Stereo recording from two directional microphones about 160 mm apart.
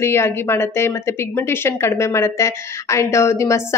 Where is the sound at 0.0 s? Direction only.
15° left (ahead or behind).